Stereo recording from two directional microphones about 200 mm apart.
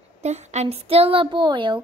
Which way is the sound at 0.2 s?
35° right (ahead or behind).